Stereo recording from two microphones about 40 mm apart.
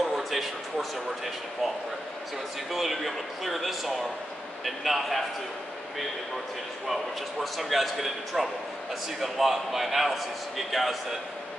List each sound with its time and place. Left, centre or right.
0.0 s a sound: centre
2.7 s a man's voice: centre
6.9 s a man's voice: centre